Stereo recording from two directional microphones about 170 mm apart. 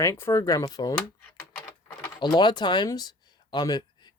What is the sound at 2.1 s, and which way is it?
Speech, 25° left (ahead or behind).